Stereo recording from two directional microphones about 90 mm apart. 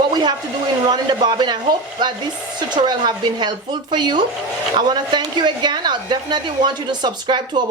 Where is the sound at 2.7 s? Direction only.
55° right (ahead or behind).